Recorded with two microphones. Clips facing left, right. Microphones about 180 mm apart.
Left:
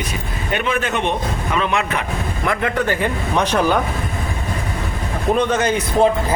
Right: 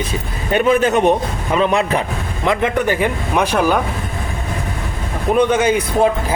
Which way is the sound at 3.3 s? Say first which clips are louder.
Right 2 dB; 10° right (ahead or behind).